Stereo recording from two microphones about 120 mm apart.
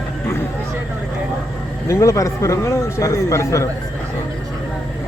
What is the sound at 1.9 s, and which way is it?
A man's voice, 25° left (ahead or behind).